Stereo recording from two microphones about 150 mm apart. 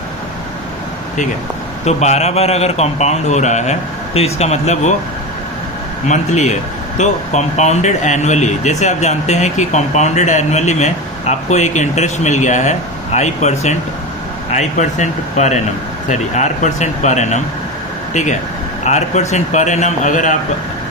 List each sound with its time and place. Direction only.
1.8 s speech: 50° left (ahead or behind)
6.1 s speech: 50° left (ahead or behind)